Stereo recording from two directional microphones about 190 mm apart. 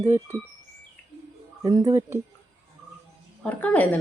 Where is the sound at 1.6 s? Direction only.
20° right (ahead or behind).